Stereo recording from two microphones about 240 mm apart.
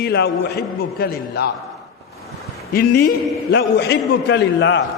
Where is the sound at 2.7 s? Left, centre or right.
Left.